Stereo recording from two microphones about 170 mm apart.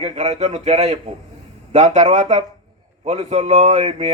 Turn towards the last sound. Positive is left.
turn(degrees=-40)  # may be behind; listen again after turning